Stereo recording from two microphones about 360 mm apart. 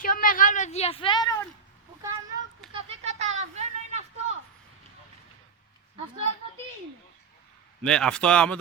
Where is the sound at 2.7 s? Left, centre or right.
Centre.